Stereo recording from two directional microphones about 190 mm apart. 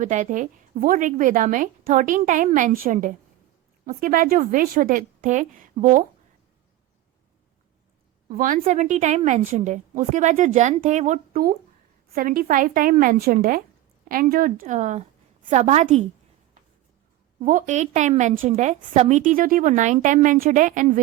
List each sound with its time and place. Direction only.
0.0 s a woman's voice: 45° right (ahead or behind)
8.4 s a woman's voice: 45° right (ahead or behind)
17.4 s a woman's voice: 40° right (ahead or behind)